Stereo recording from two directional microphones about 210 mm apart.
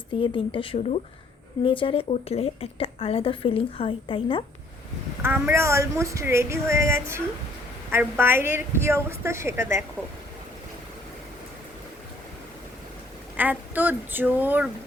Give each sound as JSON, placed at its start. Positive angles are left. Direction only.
{"t": 0.1, "sound": "a woman's voice", "side_deg": 25}
{"t": 5.2, "sound": "speech", "side_deg": -10}
{"t": 13.3, "sound": "speech", "side_deg": -10}